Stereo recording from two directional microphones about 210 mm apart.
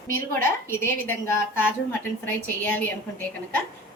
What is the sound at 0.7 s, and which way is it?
Speech, 10° left (ahead or behind).